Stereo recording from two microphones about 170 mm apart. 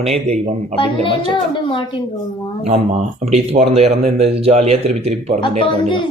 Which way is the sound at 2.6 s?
40° right (ahead or behind).